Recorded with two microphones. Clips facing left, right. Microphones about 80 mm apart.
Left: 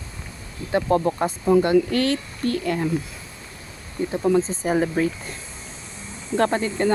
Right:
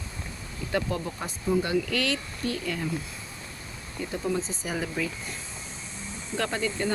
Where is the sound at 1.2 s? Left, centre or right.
Left.